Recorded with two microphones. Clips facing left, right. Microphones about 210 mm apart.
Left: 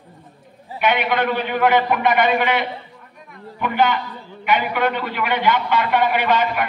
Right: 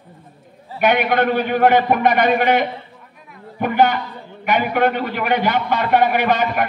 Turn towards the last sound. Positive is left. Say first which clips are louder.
# right 1 dB
turn(degrees=-45)  # may be behind; listen again after turning